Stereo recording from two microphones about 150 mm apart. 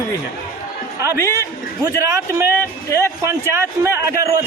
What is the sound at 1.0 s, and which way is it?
A man's voice, 20° right (ahead or behind).